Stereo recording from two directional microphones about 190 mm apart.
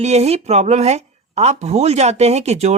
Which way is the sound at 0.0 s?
35° right (ahead or behind).